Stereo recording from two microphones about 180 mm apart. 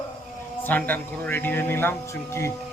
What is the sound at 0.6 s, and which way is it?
A man's voice, 10° left (ahead or behind).